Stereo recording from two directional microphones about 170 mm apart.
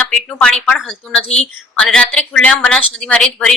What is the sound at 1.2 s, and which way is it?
Speech, 40° left (ahead or behind).